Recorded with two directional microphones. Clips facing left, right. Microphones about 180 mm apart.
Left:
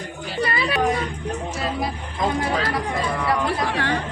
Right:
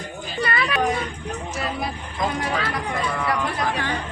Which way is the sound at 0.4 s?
30° left (ahead or behind).